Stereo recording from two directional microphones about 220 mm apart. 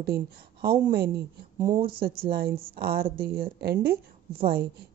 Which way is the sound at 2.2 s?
45° right (ahead or behind).